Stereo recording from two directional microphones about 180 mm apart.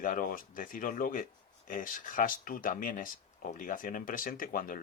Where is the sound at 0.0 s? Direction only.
50° left (ahead or behind).